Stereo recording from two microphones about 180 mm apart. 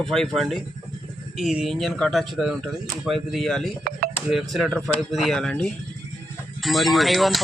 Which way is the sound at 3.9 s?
55° right (ahead or behind).